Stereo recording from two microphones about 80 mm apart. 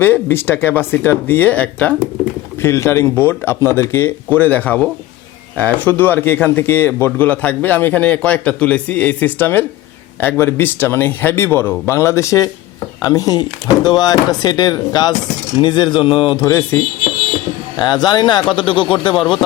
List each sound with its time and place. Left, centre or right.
0.0 s speech: left
2.6 s speech: left
4.4 s speech: left
13.0 s speech: left
15.6 s speech: left
16.5 s speech: left
17.7 s speech: left
18.5 s speech: left
19.1 s speech: centre